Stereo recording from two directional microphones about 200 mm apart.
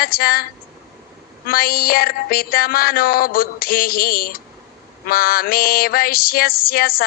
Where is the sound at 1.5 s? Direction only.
45° left (ahead or behind).